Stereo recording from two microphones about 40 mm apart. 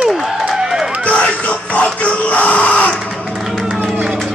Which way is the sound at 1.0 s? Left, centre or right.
Left.